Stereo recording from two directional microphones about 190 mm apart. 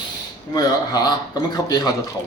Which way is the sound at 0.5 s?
20° left (ahead or behind).